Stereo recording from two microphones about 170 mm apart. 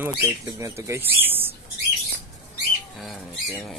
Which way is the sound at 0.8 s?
15° right (ahead or behind).